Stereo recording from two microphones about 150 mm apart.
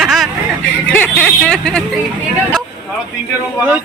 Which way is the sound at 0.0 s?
Centre (ahead or behind).